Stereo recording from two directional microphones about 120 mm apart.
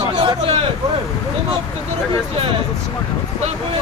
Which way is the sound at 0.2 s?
40° right (ahead or behind).